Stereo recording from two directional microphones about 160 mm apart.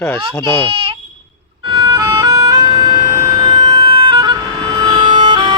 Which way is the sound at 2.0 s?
20° right (ahead or behind).